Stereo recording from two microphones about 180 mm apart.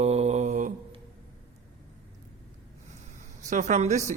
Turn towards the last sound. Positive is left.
turn(degrees=-40)  # may be behind; listen again after turning